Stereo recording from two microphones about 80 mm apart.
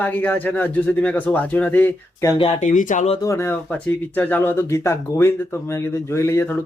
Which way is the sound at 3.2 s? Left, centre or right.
Left.